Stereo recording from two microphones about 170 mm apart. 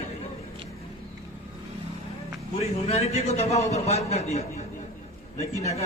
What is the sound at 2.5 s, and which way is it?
A man's voice, 40° left (ahead or behind).